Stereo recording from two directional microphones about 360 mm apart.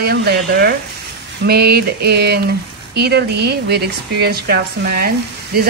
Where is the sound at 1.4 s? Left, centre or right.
Right.